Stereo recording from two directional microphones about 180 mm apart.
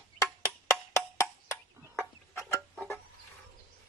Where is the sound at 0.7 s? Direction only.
15° left (ahead or behind).